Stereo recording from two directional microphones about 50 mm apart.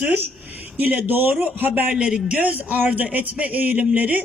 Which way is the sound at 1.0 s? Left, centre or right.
Right.